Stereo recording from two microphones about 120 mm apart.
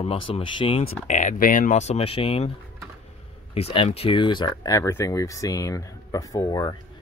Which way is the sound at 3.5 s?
55° left (ahead or behind).